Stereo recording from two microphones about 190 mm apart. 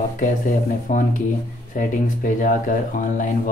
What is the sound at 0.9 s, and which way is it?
Speech, 45° left (ahead or behind).